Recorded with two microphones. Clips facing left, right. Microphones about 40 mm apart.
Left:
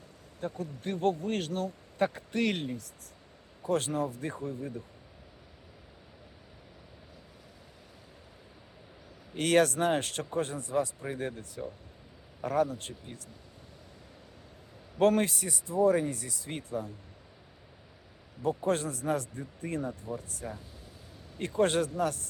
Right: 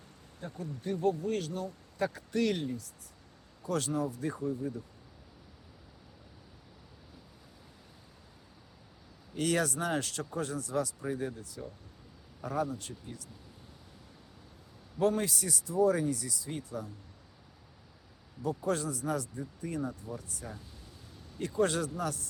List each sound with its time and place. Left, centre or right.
0.3 s speech: left
2.0 s speech: left
9.3 s speech: left
14.9 s speech: left
18.4 s speech: left